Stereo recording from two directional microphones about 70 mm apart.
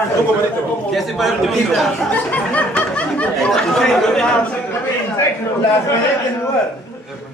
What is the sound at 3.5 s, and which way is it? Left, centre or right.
Speech, centre.